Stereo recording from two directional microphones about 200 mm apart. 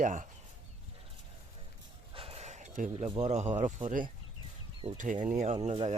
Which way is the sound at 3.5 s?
40° right (ahead or behind).